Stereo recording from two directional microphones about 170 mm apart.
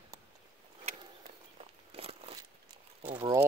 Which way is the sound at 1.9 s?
35° right (ahead or behind).